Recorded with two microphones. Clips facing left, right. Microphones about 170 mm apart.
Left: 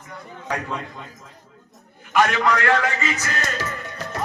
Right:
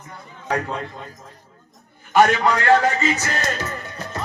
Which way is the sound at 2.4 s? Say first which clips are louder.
Right 3 dB; 30° right (ahead or behind).